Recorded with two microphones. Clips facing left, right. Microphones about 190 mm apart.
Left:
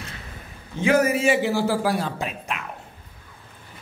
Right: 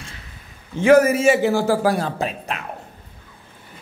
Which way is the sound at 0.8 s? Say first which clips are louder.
Right 6 dB; 45° right (ahead or behind).